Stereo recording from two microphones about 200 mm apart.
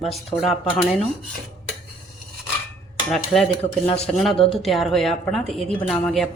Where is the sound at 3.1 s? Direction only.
Centre (ahead or behind).